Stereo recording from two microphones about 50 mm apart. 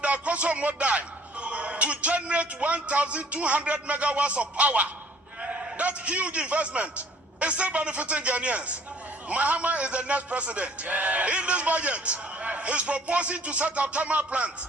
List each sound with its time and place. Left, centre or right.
0.0 s a man's voice: right